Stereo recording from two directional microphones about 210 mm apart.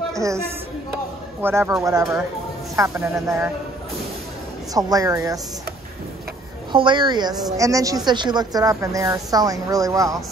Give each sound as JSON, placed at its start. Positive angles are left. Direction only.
{"t": 0.1, "sound": "a woman's voice", "side_deg": -15}
{"t": 1.4, "sound": "a woman's voice", "side_deg": -10}
{"t": 4.7, "sound": "a woman's voice", "side_deg": -15}
{"t": 6.7, "sound": "a woman's voice", "side_deg": -20}